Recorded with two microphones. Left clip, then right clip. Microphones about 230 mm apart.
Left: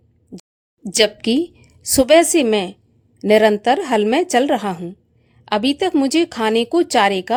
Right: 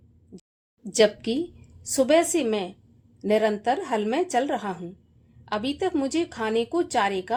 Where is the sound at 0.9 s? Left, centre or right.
Left.